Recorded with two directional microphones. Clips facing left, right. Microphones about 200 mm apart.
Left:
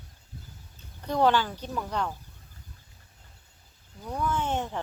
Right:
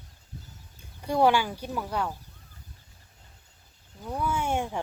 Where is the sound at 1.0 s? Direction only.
10° right (ahead or behind).